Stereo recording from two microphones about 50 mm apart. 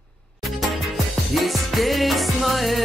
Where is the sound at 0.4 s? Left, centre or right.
Centre.